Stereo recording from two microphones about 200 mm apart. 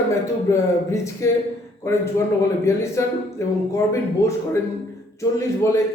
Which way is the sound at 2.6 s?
15° left (ahead or behind).